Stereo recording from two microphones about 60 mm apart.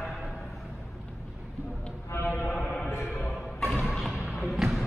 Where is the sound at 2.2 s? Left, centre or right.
Left.